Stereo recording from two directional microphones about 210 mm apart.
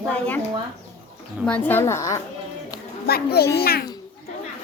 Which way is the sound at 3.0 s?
50° left (ahead or behind).